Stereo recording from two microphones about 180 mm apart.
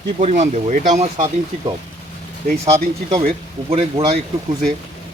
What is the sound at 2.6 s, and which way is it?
Speech, 15° right (ahead or behind).